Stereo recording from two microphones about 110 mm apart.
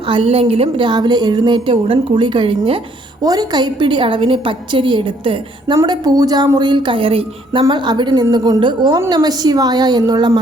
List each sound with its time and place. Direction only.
0.1 s a woman's voice: 55° right (ahead or behind)
3.2 s a woman's voice: 40° right (ahead or behind); by 7.6 s 55° right (ahead or behind)
7.7 s a woman's voice: 45° right (ahead or behind)